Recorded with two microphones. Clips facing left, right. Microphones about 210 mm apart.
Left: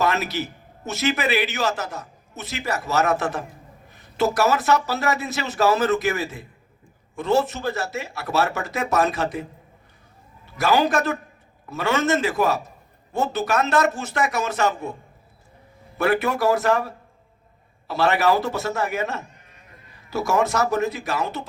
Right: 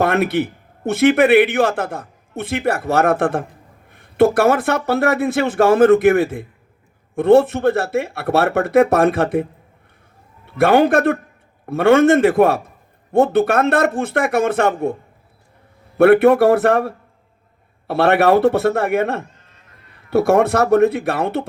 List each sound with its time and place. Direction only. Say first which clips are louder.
0.0 s a man's voice: right 7 dB; 55° right (ahead or behind)
16.0 s a man's voice: right 11 dB; 60° right (ahead or behind)
19.2 s bleat: right 4 dB; 20° left (ahead or behind)
19.9 s a man's voice: right 9 dB; 60° right (ahead or behind)